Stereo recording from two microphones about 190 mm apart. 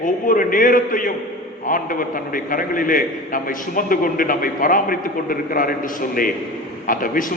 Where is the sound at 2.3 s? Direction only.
45° left (ahead or behind).